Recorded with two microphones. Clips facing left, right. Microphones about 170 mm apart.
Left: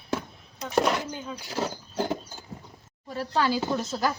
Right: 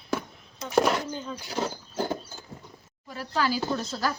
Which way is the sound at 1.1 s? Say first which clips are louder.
Right 1 dB; 10° left (ahead or behind).